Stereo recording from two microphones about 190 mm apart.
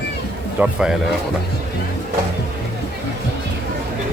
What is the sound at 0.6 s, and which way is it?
Speech, 5° right (ahead or behind).